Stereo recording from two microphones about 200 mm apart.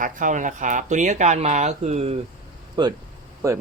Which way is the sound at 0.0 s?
40° right (ahead or behind).